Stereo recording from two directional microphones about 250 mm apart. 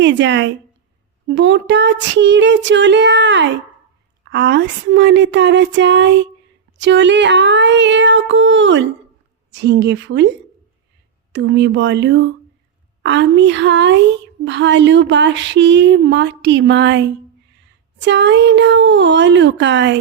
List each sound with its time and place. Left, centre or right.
0.0 s speech: right
11.3 s speech: right